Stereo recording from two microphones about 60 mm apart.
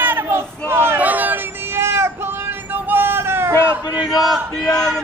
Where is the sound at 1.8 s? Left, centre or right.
Right.